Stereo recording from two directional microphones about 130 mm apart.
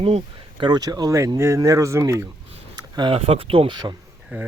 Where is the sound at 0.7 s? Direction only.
30° right (ahead or behind).